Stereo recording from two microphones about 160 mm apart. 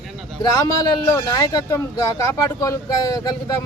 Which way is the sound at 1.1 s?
20° left (ahead or behind).